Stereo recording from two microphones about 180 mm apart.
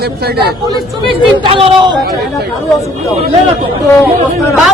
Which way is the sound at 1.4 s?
30° right (ahead or behind).